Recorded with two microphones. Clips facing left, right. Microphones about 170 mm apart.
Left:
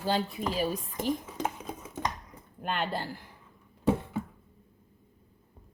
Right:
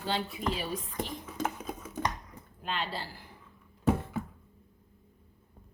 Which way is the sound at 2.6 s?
55° left (ahead or behind).